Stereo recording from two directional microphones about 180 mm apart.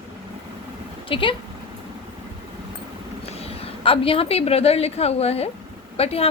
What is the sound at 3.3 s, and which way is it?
A woman's voice, 35° left (ahead or behind).